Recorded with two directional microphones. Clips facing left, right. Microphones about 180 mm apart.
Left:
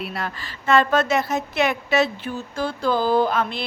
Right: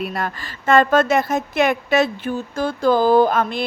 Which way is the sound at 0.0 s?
45° right (ahead or behind).